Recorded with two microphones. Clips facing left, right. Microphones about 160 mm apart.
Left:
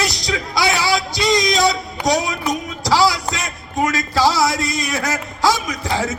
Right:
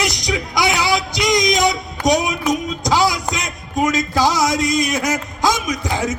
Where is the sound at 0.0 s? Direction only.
20° right (ahead or behind).